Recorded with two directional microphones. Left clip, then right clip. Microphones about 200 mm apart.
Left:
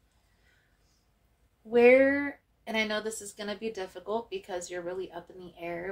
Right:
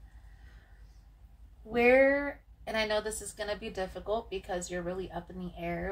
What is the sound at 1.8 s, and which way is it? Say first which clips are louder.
A woman's voice: left 2 dB; 50° left (ahead or behind).